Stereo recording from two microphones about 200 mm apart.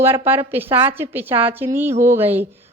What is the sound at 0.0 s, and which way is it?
A woman's voice, 10° right (ahead or behind).